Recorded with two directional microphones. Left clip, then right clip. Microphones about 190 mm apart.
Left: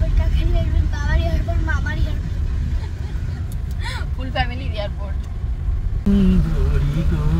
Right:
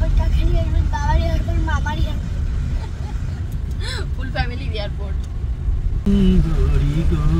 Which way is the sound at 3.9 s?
15° right (ahead or behind).